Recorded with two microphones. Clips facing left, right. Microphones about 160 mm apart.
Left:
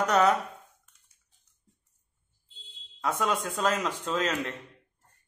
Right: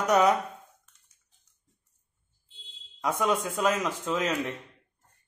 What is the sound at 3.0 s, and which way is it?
A man's voice, 15° right (ahead or behind).